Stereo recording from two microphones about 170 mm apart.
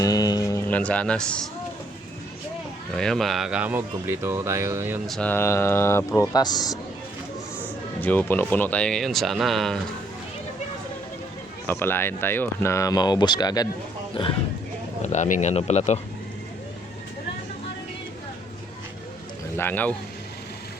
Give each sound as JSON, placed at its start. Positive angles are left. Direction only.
{"t": 0.0, "sound": "a sound", "side_deg": 20}
{"t": 0.7, "sound": "speech", "side_deg": 5}
{"t": 2.9, "sound": "speech", "side_deg": 5}
{"t": 5.0, "sound": "speech", "side_deg": 5}
{"t": 8.0, "sound": "speech", "side_deg": 10}
{"t": 11.6, "sound": "speech", "side_deg": 10}
{"t": 15.0, "sound": "speech", "side_deg": 45}
{"t": 19.5, "sound": "speech", "side_deg": 10}